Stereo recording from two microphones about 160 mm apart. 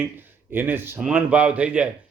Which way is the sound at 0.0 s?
10° right (ahead or behind).